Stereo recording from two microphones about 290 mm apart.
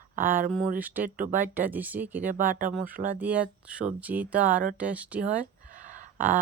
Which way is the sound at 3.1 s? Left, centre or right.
Centre.